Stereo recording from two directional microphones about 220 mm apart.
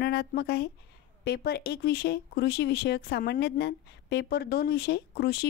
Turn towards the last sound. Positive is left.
turn(degrees=45)  # may be behind; listen again after turning